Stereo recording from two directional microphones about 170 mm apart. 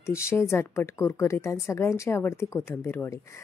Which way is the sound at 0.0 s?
15° left (ahead or behind).